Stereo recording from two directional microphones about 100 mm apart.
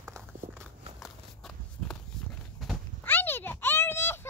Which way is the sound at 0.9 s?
5° left (ahead or behind).